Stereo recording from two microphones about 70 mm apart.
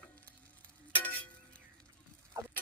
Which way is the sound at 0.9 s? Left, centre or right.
Left.